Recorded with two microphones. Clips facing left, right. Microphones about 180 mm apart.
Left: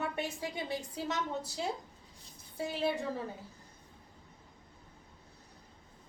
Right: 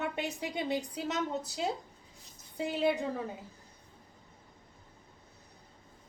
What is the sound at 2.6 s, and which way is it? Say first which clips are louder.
Speech: right 3 dB; 20° right (ahead or behind).